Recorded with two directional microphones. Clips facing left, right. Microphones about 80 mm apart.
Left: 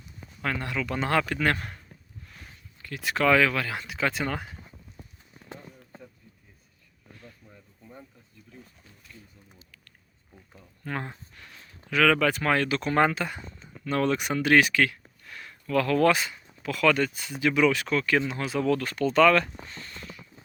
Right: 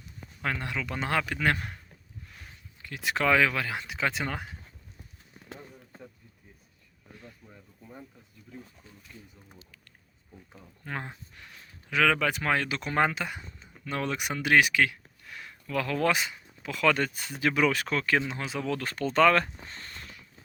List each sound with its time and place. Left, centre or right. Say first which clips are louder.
0.6 s speech: left 3 dB; centre
2.8 s speech: left 3 dB; centre
5.3 s a sound: even; centre
7.2 s a sound: even; centre
10.5 s speech: left 3 dB; centre
17.0 s speech: left 2 dB; right
18.3 s speech: left 6 dB; centre
18.8 s speech: even; right